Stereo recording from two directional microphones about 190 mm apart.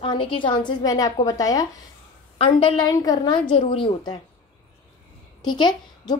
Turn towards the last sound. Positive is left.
turn(degrees=25)  # may be behind; listen again after turning